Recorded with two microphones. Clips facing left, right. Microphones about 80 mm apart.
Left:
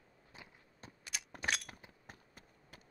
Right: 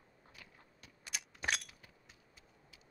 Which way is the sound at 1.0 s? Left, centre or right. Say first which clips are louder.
Even; centre.